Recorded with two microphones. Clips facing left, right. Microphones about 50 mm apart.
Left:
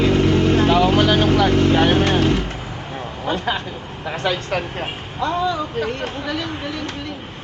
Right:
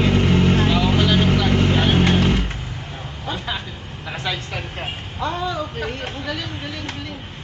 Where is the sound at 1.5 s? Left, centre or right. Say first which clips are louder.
Left 3 dB; centre.